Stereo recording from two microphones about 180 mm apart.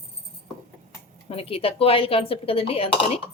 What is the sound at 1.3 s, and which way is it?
Speech, 30° left (ahead or behind).